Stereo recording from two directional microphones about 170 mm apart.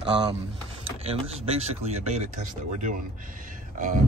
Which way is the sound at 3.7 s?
50° right (ahead or behind).